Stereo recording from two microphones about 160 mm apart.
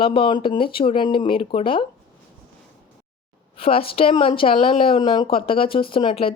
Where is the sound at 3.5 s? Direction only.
35° left (ahead or behind).